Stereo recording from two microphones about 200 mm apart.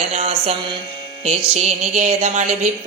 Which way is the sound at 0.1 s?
30° right (ahead or behind).